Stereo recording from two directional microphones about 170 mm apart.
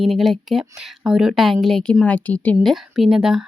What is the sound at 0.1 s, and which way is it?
A woman's voice, centre (ahead or behind).